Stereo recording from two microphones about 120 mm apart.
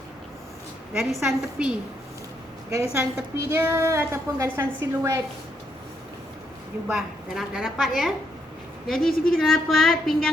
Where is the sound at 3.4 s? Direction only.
20° right (ahead or behind).